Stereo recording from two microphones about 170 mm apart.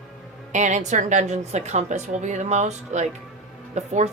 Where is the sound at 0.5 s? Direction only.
45° right (ahead or behind).